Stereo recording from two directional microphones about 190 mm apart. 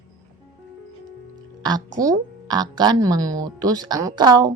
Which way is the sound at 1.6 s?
20° right (ahead or behind).